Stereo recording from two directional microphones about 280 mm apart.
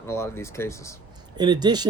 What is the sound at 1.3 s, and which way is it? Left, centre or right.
Speech, centre.